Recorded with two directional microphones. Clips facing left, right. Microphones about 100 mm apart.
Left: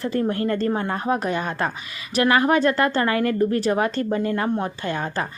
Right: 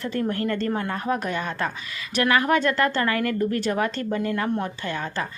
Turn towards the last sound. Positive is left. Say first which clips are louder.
# left 3 dB
turn(degrees=40)  # may be behind; listen again after turning